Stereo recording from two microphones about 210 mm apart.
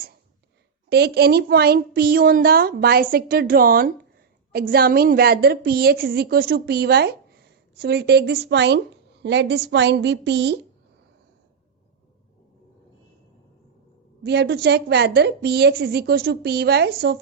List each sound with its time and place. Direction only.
0.9 s a woman's voice: 50° right (ahead or behind)
14.3 s a woman's voice: 55° right (ahead or behind)